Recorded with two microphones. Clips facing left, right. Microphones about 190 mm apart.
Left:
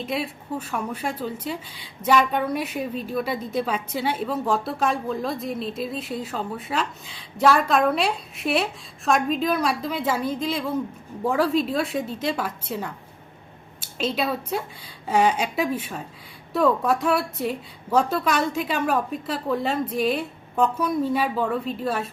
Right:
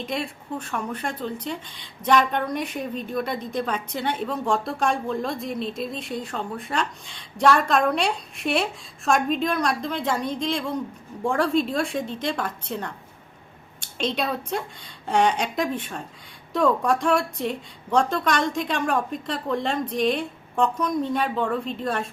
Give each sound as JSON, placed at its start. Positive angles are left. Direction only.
{"t": 0.0, "sound": "a woman's voice", "side_deg": 5}